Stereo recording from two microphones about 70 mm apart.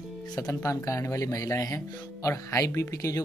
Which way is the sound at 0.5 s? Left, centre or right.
Left.